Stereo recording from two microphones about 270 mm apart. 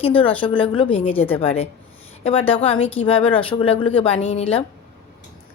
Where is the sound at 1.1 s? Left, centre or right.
Centre.